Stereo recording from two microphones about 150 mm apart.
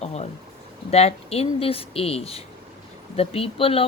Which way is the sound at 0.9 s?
45° left (ahead or behind).